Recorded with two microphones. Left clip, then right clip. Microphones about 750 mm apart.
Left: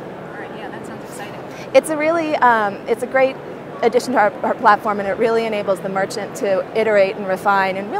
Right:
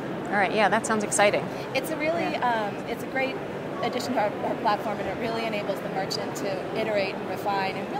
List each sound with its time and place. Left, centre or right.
1.7 s speech: left